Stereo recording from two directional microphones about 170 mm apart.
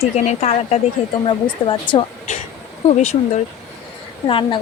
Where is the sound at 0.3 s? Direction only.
40° left (ahead or behind).